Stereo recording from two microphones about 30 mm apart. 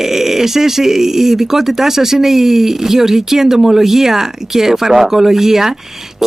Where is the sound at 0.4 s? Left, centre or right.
Centre.